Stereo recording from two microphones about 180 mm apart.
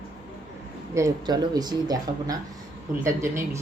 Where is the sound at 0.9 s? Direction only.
20° right (ahead or behind).